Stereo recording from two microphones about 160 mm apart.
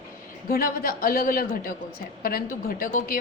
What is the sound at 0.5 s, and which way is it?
A woman's voice, 65° left (ahead or behind).